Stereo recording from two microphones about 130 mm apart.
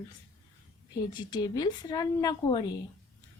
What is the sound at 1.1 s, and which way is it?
Speech, 30° left (ahead or behind).